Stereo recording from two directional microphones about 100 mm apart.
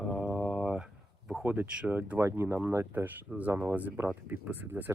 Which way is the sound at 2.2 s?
25° right (ahead or behind).